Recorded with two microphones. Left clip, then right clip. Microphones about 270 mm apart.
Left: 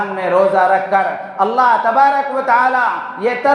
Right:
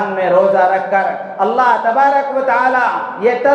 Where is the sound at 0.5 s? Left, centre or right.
Left.